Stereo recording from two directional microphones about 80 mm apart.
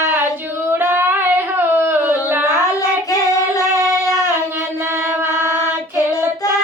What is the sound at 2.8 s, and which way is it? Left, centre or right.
Child singing, left.